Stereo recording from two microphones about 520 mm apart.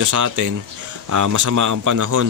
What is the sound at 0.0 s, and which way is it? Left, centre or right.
Speech, right.